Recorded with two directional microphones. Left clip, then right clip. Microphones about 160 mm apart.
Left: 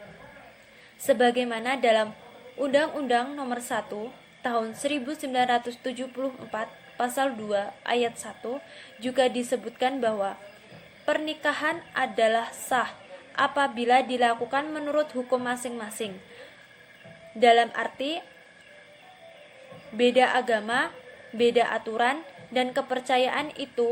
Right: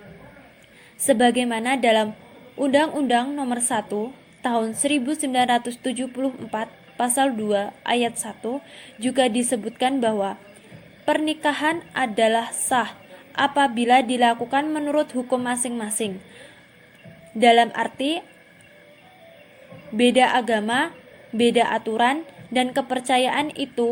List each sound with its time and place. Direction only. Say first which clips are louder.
1.0 s a woman's voice: right 3 dB; 45° right (ahead or behind)
17.4 s a woman's voice: right 4 dB; 45° right (ahead or behind)
20.0 s a woman's voice: right 4 dB; 45° right (ahead or behind)